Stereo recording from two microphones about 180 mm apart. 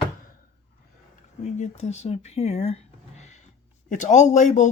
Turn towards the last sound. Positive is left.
turn(degrees=40)  # may be behind; listen again after turning